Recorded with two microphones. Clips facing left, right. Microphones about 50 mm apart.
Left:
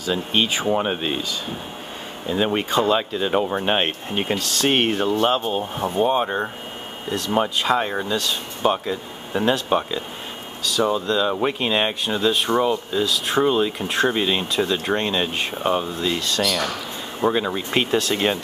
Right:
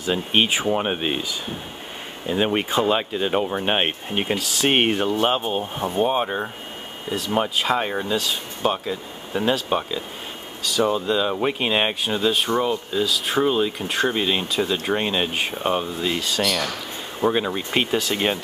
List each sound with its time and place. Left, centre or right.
0.0 s speech: right
0.7 s speech: centre
2.2 s speech: centre
5.6 s speech: centre